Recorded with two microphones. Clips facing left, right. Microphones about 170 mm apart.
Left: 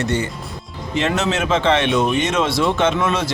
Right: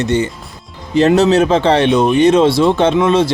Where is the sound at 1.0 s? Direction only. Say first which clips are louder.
Right 10 dB; 35° right (ahead or behind).